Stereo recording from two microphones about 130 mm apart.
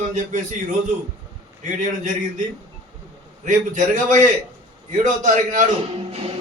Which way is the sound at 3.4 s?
75° right (ahead or behind).